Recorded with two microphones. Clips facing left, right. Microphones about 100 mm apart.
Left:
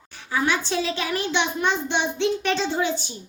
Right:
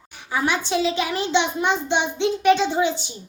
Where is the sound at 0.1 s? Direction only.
20° right (ahead or behind).